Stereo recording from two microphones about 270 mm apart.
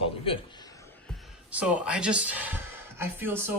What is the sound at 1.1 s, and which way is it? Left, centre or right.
Speech, centre.